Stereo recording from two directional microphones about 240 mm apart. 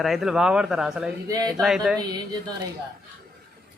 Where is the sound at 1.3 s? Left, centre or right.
Centre.